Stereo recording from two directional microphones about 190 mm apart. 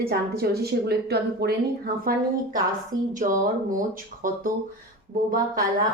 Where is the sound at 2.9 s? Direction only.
20° right (ahead or behind).